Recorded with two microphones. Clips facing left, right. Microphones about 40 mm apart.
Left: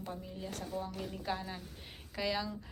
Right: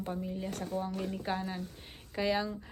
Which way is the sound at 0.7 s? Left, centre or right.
Right.